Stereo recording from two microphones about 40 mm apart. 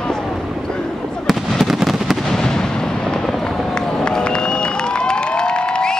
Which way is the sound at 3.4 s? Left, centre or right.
Centre.